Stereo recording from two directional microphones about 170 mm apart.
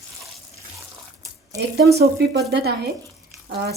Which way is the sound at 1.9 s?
80° right.